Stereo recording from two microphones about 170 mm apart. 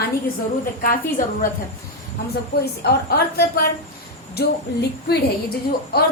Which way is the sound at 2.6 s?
70° left (ahead or behind).